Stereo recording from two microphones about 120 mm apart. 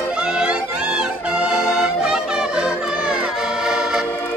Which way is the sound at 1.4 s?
5° right (ahead or behind).